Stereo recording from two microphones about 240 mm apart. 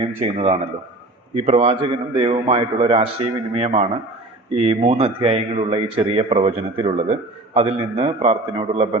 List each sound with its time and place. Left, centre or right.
0.2 s speech: right